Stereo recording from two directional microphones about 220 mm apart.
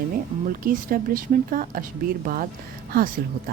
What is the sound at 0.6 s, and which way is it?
A woman's voice, 40° right (ahead or behind).